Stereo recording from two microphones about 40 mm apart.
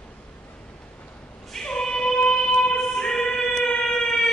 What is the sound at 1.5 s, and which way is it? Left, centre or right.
Music, centre.